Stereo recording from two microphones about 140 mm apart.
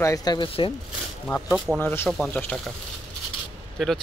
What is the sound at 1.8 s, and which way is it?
Speech, 15° left (ahead or behind).